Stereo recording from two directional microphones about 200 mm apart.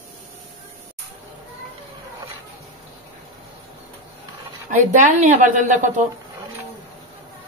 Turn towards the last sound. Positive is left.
turn(degrees=-40)  # may be behind; listen again after turning